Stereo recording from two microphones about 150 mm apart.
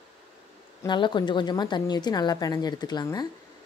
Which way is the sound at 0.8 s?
30° left (ahead or behind).